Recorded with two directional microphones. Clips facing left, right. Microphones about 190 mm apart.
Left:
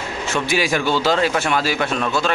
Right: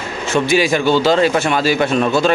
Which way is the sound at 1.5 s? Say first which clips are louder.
Right 5 dB; 5° left (ahead or behind).